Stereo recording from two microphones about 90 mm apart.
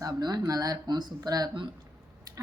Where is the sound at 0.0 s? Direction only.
50° right (ahead or behind).